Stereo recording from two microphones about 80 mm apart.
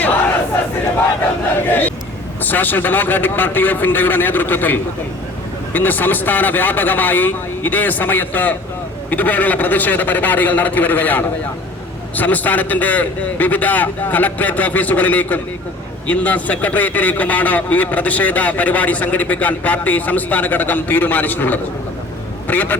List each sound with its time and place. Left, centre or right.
1.6 s a man's voice: left